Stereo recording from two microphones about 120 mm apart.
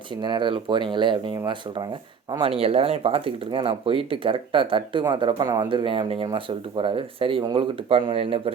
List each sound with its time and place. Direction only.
0.1 s speech: 40° right (ahead or behind)
2.4 s speech: 50° right (ahead or behind)